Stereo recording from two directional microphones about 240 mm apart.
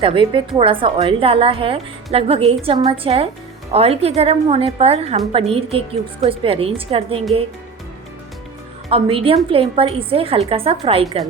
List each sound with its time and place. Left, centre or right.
0.0 s a woman's voice: right
8.9 s a woman's voice: right